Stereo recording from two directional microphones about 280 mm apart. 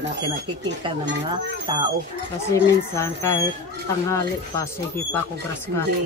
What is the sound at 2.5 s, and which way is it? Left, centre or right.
Speech, centre.